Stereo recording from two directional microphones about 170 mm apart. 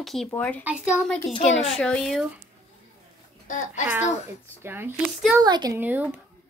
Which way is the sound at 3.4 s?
50° left (ahead or behind).